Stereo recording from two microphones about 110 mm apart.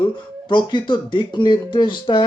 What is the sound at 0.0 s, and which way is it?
Speech, 45° left (ahead or behind).